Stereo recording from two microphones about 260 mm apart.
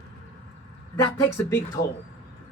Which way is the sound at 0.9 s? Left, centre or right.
Centre.